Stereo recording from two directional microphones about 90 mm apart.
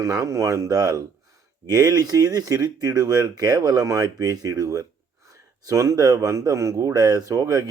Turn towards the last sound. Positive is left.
turn(degrees=-40)  # may be behind; listen again after turning